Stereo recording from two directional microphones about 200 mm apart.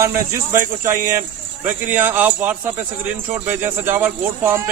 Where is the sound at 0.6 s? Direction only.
40° right (ahead or behind).